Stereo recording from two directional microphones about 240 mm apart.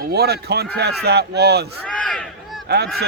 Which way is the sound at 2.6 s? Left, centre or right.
Right.